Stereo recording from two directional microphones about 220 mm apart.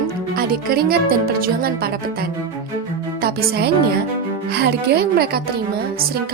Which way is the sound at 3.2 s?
45° right (ahead or behind).